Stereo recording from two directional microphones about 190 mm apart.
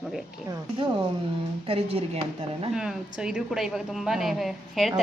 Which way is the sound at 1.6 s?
30° right (ahead or behind).